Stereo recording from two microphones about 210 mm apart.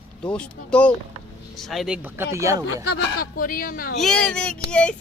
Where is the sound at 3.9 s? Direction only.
5° left (ahead or behind).